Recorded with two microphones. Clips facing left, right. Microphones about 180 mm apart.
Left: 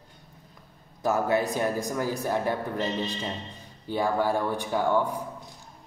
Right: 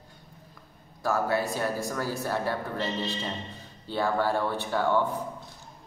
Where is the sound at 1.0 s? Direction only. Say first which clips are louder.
Left 2 dB; 20° left (ahead or behind).